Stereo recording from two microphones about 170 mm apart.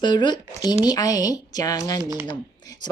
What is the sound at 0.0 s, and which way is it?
Speech, 25° left (ahead or behind).